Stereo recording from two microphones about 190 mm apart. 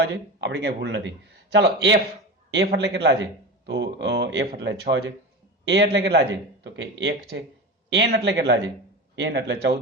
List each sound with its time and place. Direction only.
0.0 s speech: 70° right (ahead or behind)